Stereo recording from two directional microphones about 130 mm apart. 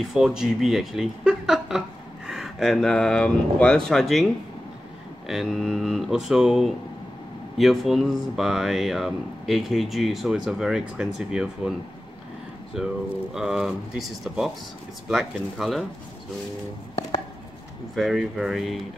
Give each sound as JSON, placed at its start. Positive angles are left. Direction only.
{"t": 0.0, "sound": "speech", "side_deg": 0}
{"t": 5.3, "sound": "speech", "side_deg": 0}
{"t": 12.7, "sound": "speech", "side_deg": -5}
{"t": 17.9, "sound": "speech", "side_deg": -5}